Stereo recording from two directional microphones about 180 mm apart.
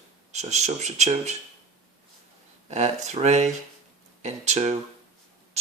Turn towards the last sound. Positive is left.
turn(degrees=-40)  # may be behind; listen again after turning